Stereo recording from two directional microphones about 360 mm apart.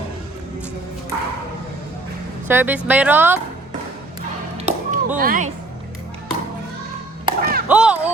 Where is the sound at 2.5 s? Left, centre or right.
Centre.